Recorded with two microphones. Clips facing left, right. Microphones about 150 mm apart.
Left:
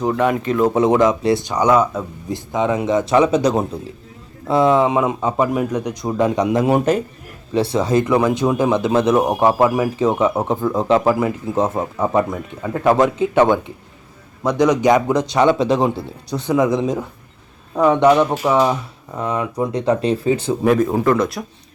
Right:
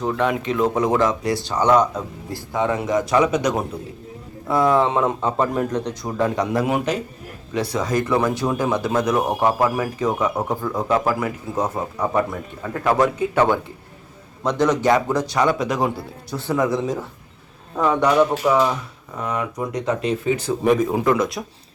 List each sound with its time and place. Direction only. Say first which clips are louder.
0.0 s speech: left 4 dB; 10° left (ahead or behind)
0.7 s speech: left 6 dB; 25° left (ahead or behind); by 2.0 s 5° left (ahead or behind)
2.3 s speech: left 3 dB; 20° left (ahead or behind)
6.7 s a man's voice: left 6 dB; 40° left (ahead or behind)
7.5 s speech: left 5 dB; 30° left (ahead or behind)
19.2 s speech: left 4 dB; 30° left (ahead or behind)
21.0 s speech: left 2 dB; centre (ahead or behind)